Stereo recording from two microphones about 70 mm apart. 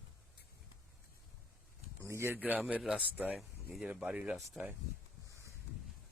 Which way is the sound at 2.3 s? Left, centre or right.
Right.